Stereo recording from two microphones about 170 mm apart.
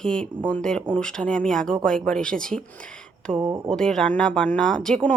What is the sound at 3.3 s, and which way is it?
Speech, 15° right (ahead or behind).